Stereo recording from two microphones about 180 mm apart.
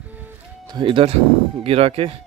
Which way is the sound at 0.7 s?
30° right (ahead or behind).